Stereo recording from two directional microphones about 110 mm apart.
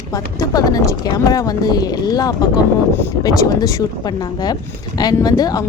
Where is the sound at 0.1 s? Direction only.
35° left (ahead or behind).